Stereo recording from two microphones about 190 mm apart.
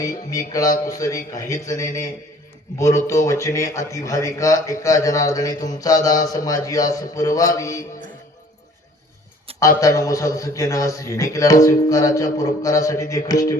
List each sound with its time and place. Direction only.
0.0 s a man's voice: 20° left (ahead or behind)
9.6 s a man's voice: 15° left (ahead or behind)